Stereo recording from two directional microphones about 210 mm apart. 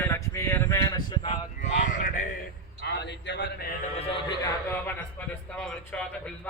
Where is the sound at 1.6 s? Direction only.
35° left (ahead or behind).